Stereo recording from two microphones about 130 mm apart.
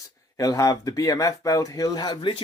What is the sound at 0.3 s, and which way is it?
Speech, 25° left (ahead or behind).